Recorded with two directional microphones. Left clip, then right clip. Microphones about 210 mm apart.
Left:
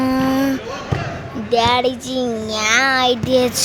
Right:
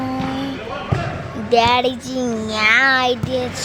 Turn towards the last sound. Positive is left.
turn(degrees=25)  # may be behind; listen again after turning